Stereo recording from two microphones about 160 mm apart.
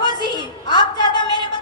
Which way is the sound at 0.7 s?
30° left (ahead or behind).